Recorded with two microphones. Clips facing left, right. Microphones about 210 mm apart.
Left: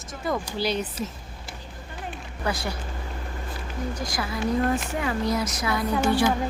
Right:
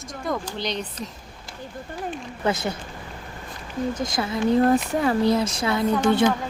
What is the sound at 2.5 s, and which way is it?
Speech, 20° right (ahead or behind).